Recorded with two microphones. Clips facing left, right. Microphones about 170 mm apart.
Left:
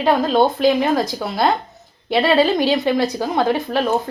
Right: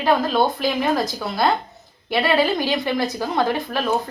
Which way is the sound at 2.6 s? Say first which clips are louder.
Left 5 dB; 20° left (ahead or behind).